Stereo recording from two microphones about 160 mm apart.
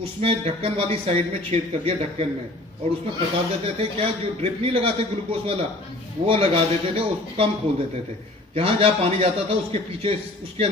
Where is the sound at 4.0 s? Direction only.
35° right (ahead or behind).